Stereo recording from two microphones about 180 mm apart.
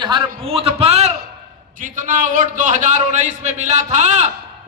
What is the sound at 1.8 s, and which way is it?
A man's voice, 50° right (ahead or behind).